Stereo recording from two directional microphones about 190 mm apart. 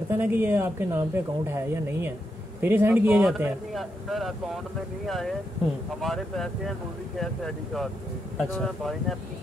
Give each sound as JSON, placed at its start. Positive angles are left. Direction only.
{"t": 0.1, "sound": "speech", "side_deg": -10}